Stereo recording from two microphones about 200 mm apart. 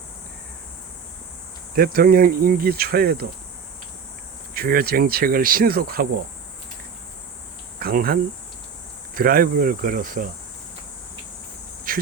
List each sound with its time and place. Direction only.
1.7 s cricket: 50° right (ahead or behind)
4.5 s cricket: 50° right (ahead or behind)
7.8 s speech: 50° right (ahead or behind)
9.1 s cricket: 45° right (ahead or behind)
11.9 s insect: 45° right (ahead or behind)